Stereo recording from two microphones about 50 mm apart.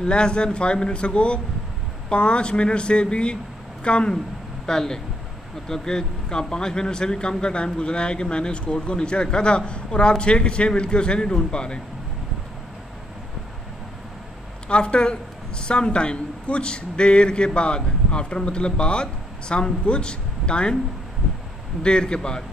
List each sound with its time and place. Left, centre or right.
0.0 s a man's voice: centre
14.7 s speech: left
21.8 s a man's voice: centre